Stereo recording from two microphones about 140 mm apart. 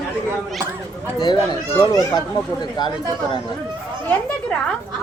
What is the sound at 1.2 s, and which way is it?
A child's voice, 25° left (ahead or behind).